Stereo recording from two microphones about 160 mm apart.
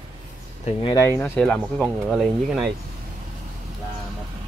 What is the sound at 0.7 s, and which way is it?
Speech, 30° left (ahead or behind).